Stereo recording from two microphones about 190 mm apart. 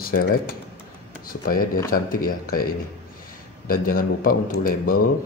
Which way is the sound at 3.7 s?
50° left (ahead or behind).